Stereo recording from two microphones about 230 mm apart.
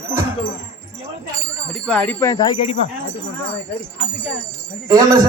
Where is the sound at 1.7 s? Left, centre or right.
Centre.